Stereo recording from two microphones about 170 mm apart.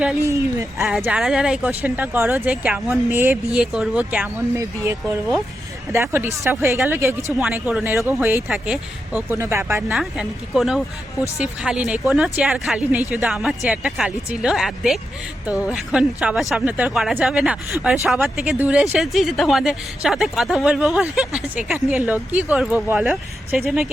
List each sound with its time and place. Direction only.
0.3 s speech: 15° right (ahead or behind)
0.9 s speech: 5° right (ahead or behind)
9.9 s speech: 5° right (ahead or behind)